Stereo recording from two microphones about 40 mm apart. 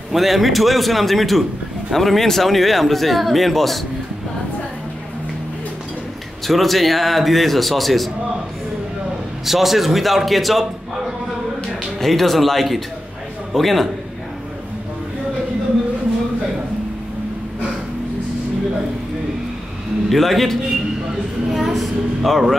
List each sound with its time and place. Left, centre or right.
0.1 s speech: centre
6.4 s speech: centre
9.5 s speech: centre
12.0 s a man's voice: centre
20.1 s speech: centre
21.5 s a sound: centre